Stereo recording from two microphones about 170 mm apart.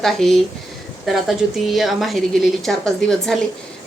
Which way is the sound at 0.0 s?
Centre (ahead or behind).